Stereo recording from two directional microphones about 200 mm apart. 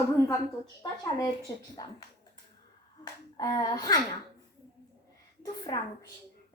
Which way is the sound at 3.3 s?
20° left (ahead or behind).